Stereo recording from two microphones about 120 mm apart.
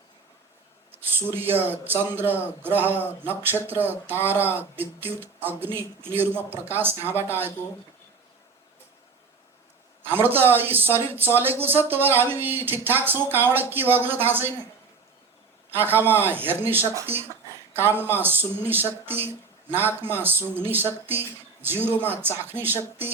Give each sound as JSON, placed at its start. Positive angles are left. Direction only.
{"t": 1.0, "sound": "speech", "side_deg": -15}
{"t": 7.0, "sound": "speech", "side_deg": 20}
{"t": 10.0, "sound": "speech", "side_deg": -15}
{"t": 15.7, "sound": "speech", "side_deg": -15}